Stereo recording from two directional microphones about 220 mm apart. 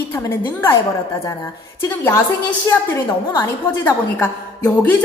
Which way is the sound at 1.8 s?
10° left (ahead or behind).